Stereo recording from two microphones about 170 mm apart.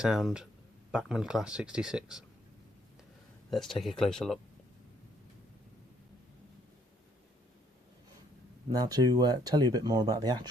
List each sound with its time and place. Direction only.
0.0 s speech: 5° right (ahead or behind)
3.5 s speech: centre (ahead or behind)
8.7 s speech: 20° right (ahead or behind)